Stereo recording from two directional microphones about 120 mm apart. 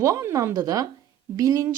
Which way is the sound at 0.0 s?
25° right (ahead or behind).